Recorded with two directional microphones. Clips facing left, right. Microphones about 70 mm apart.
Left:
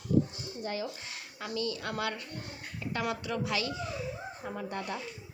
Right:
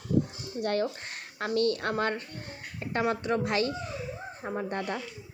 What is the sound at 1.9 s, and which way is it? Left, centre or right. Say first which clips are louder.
A woman's voice: right 5 dB; right.